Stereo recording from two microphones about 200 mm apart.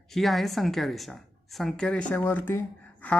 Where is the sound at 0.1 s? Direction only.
Centre (ahead or behind).